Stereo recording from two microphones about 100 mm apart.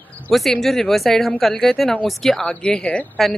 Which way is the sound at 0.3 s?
Centre (ahead or behind).